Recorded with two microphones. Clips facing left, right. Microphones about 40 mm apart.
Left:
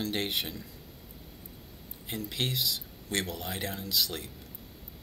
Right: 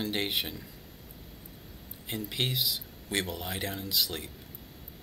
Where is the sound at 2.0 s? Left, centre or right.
Centre.